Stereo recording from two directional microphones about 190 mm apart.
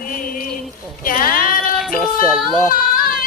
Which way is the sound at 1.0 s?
50° left (ahead or behind).